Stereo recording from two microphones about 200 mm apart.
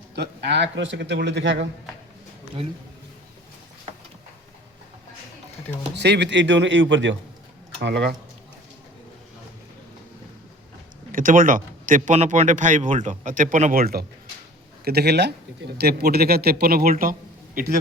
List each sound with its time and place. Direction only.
0.2 s a man's voice: 60° right (ahead or behind)
6.0 s a man's voice: 60° right (ahead or behind)
11.1 s a man's voice: 40° right (ahead or behind)